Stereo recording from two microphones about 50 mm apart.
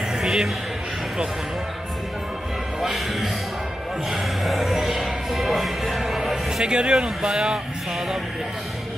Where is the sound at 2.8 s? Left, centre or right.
Centre.